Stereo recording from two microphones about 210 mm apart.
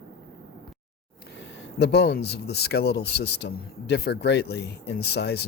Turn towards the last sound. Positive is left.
turn(degrees=50)  # may be behind; listen again after turning